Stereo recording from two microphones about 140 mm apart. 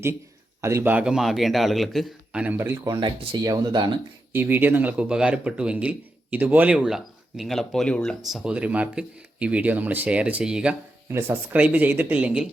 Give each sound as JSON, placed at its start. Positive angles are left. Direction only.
{"t": 0.6, "sound": "a man's voice", "side_deg": -20}
{"t": 4.3, "sound": "a man's voice", "side_deg": -15}
{"t": 11.1, "sound": "a man's voice", "side_deg": -15}